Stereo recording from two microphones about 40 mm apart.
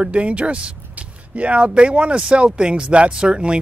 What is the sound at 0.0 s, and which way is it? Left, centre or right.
Speech, right.